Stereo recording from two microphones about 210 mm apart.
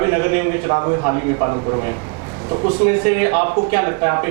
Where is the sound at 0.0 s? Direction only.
20° right (ahead or behind).